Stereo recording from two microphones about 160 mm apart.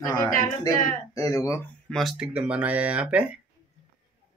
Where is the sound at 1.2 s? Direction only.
20° left (ahead or behind).